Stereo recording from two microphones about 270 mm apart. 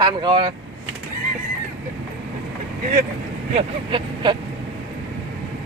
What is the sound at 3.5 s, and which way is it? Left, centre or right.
Speech, right.